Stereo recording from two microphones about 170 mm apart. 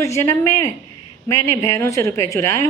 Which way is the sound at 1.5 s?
15° left (ahead or behind).